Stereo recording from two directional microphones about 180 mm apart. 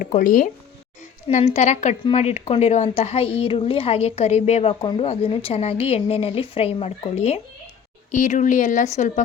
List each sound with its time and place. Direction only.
0.1 s speech: 50° left (ahead or behind)
1.3 s a woman's voice: 40° left (ahead or behind)